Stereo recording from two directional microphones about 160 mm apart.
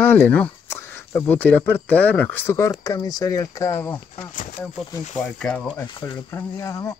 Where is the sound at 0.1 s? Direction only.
10° left (ahead or behind).